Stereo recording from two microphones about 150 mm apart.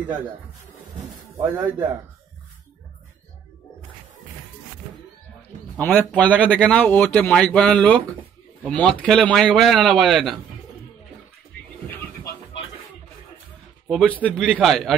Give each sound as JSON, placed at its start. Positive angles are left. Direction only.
{"t": 1.6, "sound": "speech", "side_deg": -30}
{"t": 5.9, "sound": "speech", "side_deg": 10}
{"t": 13.8, "sound": "speech", "side_deg": 5}